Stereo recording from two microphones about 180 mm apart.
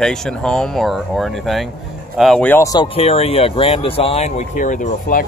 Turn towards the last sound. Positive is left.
turn(degrees=50)  # may be behind; listen again after turning